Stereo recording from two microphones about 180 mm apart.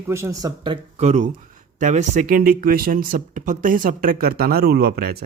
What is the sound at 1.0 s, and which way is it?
Speech, 40° right (ahead or behind).